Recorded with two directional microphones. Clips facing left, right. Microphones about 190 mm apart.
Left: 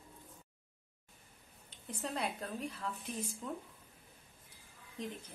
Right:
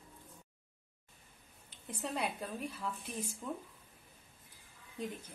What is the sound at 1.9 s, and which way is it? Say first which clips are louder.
A woman's voice: right 1 dB; 10° right (ahead or behind).